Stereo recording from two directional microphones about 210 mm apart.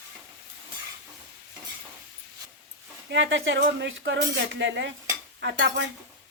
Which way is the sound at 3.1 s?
60° right (ahead or behind).